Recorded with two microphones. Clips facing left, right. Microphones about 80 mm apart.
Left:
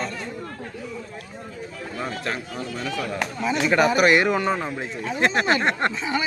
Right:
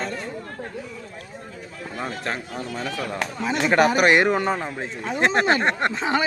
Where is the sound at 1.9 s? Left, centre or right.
Right.